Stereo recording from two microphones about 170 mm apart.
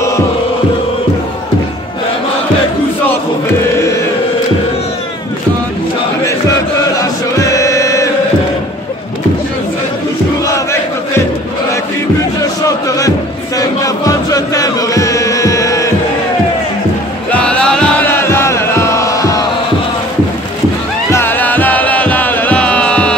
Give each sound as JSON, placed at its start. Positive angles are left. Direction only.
{"t": 7.0, "sound": "chant", "side_deg": 20}
{"t": 10.4, "sound": "crowd", "side_deg": 15}
{"t": 12.4, "sound": "chant", "side_deg": 20}
{"t": 17.3, "sound": "music", "side_deg": 5}
{"t": 21.1, "sound": "music", "side_deg": 15}